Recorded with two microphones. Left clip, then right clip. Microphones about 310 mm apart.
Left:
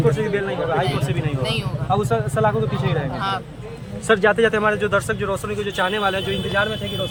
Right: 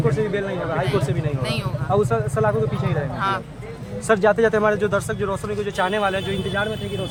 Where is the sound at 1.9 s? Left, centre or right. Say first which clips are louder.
Even; centre.